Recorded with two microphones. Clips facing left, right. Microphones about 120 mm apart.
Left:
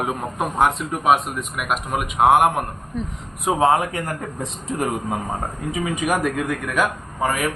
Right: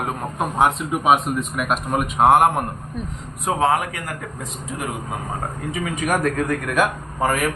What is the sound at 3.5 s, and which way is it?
Speech, 25° left (ahead or behind).